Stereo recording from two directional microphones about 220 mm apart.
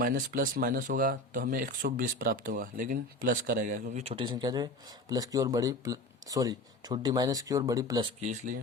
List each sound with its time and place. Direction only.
0.0 s speech: 40° right (ahead or behind); by 8.0 s 15° right (ahead or behind)
8.2 s speech: 35° right (ahead or behind)